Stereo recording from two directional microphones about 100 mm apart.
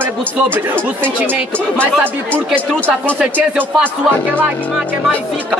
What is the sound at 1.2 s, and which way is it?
Speech, 20° right (ahead or behind).